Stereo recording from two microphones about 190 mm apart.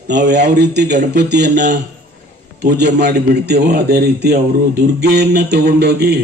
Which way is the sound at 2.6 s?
60° right (ahead or behind).